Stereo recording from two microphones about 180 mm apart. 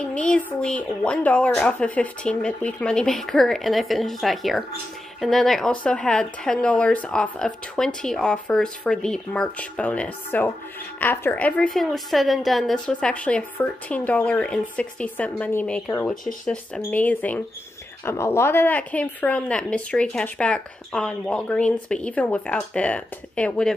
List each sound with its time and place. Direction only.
0.1 s speech: 5° left (ahead or behind)